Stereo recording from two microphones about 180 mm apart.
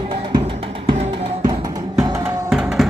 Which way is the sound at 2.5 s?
5° right (ahead or behind).